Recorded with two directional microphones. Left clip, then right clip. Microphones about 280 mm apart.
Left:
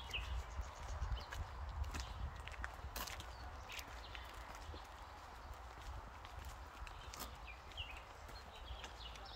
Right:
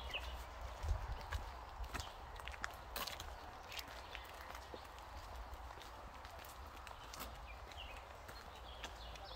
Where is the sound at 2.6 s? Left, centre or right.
Centre.